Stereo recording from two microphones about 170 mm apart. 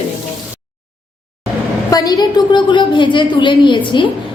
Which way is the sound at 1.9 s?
20° left (ahead or behind).